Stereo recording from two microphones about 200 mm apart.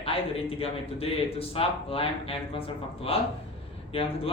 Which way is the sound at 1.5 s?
30° left (ahead or behind).